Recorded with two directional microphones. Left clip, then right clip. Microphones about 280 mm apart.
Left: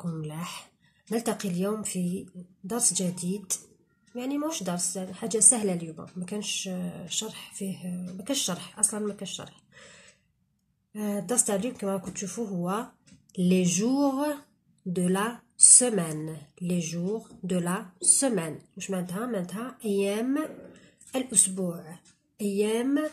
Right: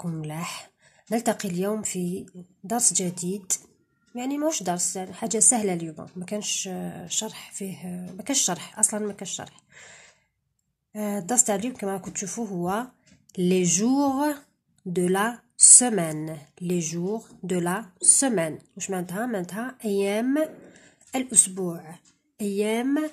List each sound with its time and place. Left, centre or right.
0.0 s a woman's voice: right